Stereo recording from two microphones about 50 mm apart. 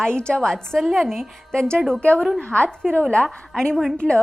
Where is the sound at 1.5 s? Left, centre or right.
Centre.